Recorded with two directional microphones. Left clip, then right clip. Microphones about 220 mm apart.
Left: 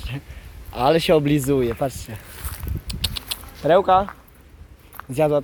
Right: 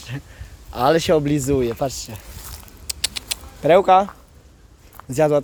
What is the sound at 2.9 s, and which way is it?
Keys jangling, 25° right (ahead or behind).